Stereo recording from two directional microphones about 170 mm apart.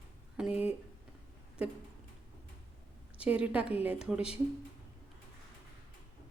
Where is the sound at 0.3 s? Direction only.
5° right (ahead or behind).